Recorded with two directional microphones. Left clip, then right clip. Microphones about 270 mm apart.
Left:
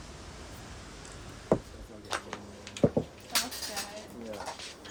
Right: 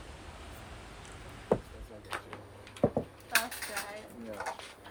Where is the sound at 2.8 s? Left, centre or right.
Centre.